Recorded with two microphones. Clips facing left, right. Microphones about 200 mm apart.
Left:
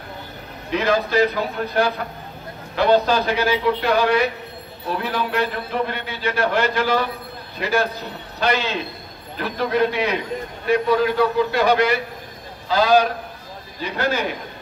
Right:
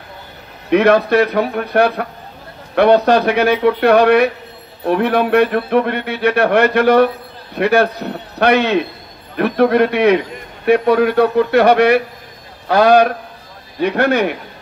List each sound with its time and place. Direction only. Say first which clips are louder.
0.7 s a man's voice: right 9 dB; 60° right (ahead or behind)